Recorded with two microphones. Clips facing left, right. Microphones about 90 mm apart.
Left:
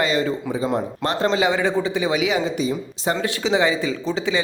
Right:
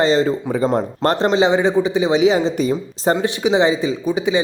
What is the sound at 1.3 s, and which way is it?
Speech, 20° right (ahead or behind).